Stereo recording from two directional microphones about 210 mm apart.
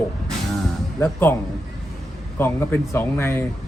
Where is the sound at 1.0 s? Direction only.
10° left (ahead or behind).